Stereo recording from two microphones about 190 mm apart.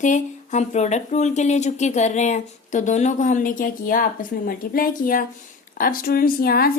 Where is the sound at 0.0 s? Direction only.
40° left (ahead or behind).